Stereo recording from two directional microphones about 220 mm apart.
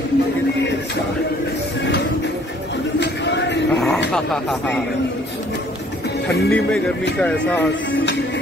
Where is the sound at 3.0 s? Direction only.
50° left (ahead or behind).